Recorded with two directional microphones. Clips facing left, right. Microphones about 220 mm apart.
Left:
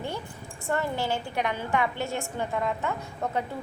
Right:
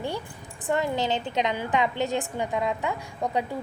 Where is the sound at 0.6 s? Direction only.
15° right (ahead or behind).